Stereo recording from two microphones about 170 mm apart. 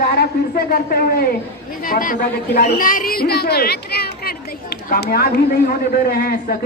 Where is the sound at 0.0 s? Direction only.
65° left (ahead or behind).